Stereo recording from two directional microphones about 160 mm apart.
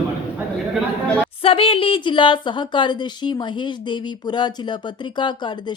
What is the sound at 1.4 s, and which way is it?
A woman's voice, 35° left (ahead or behind).